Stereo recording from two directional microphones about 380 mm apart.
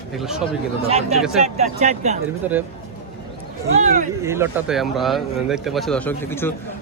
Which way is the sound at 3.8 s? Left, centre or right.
Centre.